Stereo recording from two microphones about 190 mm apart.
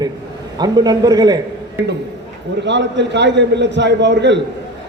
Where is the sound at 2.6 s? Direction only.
70° right (ahead or behind).